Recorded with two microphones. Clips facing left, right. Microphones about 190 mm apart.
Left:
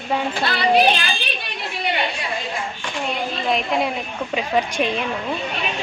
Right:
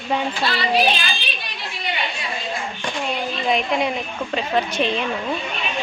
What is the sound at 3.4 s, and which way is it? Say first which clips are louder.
A woman's voice: right 1 dB; centre (ahead or behind).